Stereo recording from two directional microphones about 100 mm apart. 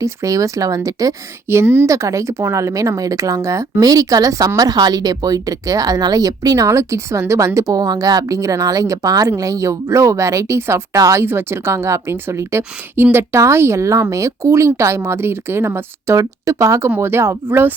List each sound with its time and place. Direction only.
0.0 s a woman's voice: 35° right (ahead or behind)